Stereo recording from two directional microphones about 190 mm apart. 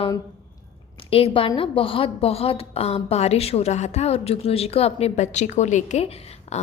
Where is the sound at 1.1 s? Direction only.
30° left (ahead or behind).